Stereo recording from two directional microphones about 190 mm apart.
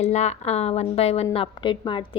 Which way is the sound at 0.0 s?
35° left (ahead or behind).